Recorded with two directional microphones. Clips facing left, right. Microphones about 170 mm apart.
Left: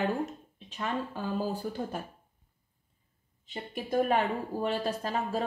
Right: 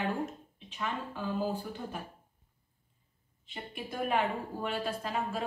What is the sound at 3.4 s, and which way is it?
A woman's voice, 40° left (ahead or behind).